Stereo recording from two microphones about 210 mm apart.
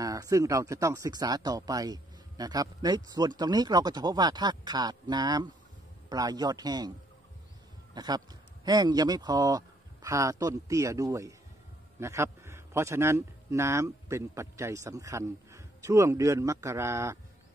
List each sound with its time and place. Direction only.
0.0 s speech: 15° right (ahead or behind)
7.9 s a man's voice: 20° right (ahead or behind)